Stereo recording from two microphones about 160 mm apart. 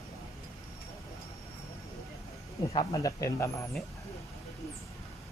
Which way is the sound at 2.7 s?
20° left (ahead or behind).